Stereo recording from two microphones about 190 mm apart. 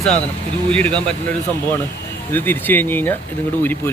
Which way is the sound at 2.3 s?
10° left (ahead or behind).